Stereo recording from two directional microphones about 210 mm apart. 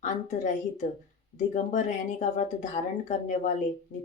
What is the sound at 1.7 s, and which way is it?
Speech, 35° left (ahead or behind).